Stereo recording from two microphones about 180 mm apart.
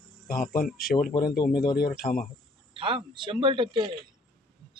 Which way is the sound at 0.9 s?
50° left (ahead or behind).